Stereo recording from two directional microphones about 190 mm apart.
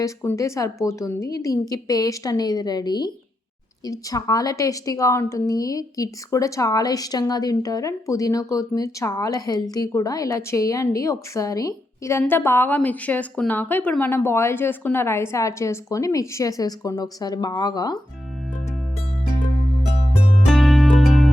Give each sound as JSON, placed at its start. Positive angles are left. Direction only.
{"t": 0.0, "sound": "a woman's voice", "side_deg": 15}
{"t": 20.5, "sound": "music", "side_deg": 0}